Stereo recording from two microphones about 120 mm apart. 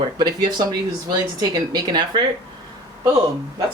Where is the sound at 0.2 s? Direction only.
35° right (ahead or behind).